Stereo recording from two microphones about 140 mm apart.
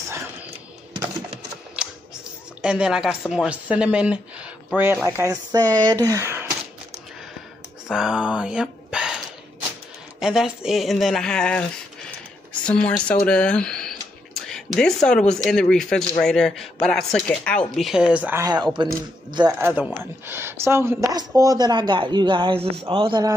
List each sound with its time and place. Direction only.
1.8 s a sound: 5° right (ahead or behind)
2.6 s speech: 5° right (ahead or behind)
7.9 s speech: 5° right (ahead or behind)
10.2 s speech: 5° right (ahead or behind)
12.6 s speech: 10° left (ahead or behind); by 18.4 s 10° right (ahead or behind)
18.4 s speech: 30° right (ahead or behind)
19.6 s speech: 10° right (ahead or behind); by 23.3 s 35° right (ahead or behind)